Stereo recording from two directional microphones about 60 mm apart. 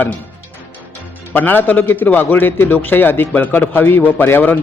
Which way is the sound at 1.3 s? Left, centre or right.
Left.